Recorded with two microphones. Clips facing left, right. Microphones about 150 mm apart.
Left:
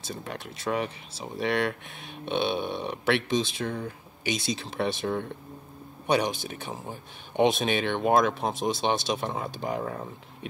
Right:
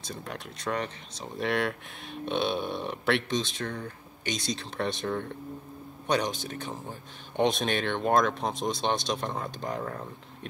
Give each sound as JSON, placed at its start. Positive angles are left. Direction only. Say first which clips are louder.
{"t": 0.0, "sound": "speech", "louder": "left 2 dB", "side_deg": 0}